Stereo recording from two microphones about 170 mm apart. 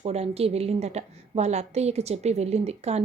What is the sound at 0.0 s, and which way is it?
A woman's voice, 35° right (ahead or behind).